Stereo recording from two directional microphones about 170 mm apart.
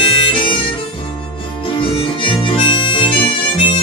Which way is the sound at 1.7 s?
30° left (ahead or behind).